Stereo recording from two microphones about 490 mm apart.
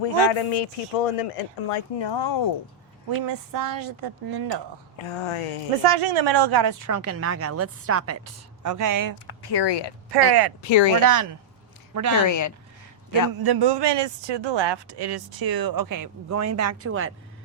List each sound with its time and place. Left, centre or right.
0.0 s speech: left
3.2 s speech: right
4.9 s speech: left
5.8 s a woman's voice: right
9.1 s speech: left
10.1 s speech: right
10.6 s speech: left
11.0 s a woman's voice: right
12.2 s speech: left
13.4 s speech: right